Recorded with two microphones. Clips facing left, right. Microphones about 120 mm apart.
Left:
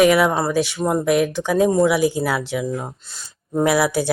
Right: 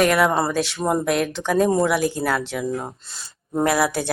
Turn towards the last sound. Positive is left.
turn(degrees=5)  # may be behind; listen again after turning